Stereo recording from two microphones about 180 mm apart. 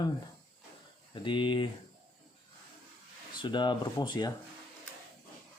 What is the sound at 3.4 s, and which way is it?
Speech, 25° left (ahead or behind).